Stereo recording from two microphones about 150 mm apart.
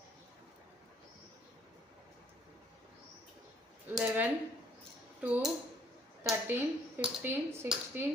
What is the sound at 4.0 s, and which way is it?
Speech, 10° right (ahead or behind).